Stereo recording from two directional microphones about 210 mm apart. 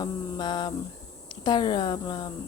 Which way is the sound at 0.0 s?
20° left (ahead or behind).